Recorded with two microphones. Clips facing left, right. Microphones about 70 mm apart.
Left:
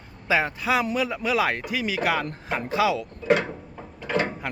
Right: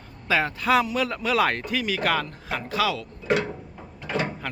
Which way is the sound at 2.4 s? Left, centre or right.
Left.